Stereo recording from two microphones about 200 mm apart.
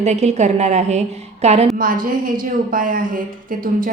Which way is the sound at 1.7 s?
45° right (ahead or behind).